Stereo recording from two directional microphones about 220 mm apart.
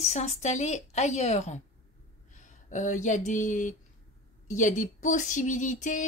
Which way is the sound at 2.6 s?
35° left (ahead or behind).